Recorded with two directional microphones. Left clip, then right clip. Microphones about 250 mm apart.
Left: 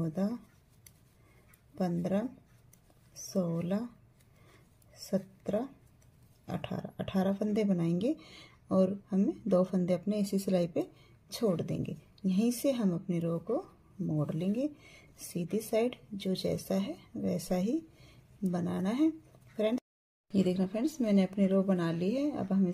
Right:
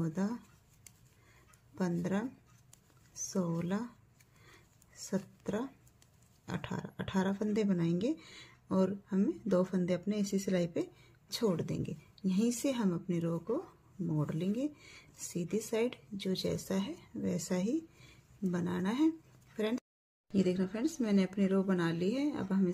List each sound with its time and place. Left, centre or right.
0.0 s speech: centre
1.8 s speech: centre
3.3 s speech: centre
5.0 s a woman's voice: centre